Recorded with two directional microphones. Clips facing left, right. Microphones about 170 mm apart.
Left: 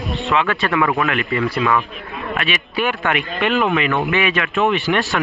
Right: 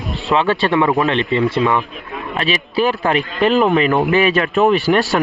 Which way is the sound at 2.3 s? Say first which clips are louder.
Right 5 dB; 35° right (ahead or behind).